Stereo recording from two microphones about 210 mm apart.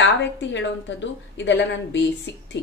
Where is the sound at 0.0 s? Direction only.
60° left (ahead or behind).